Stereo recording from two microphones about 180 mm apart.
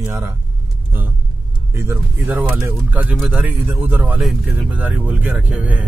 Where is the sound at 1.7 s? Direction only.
15° right (ahead or behind).